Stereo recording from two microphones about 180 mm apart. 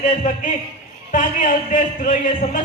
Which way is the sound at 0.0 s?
45° left (ahead or behind).